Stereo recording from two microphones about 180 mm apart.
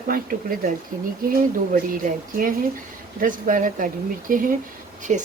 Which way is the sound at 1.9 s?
50° right (ahead or behind).